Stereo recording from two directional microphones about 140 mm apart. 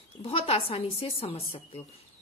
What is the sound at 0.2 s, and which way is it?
A woman's voice, 45° left (ahead or behind).